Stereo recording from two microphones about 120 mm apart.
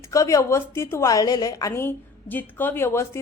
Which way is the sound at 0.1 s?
25° left (ahead or behind).